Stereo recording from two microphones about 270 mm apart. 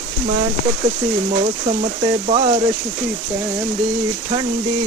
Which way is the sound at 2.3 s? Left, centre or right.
Centre.